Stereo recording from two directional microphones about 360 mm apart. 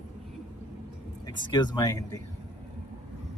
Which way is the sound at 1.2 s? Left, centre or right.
Centre.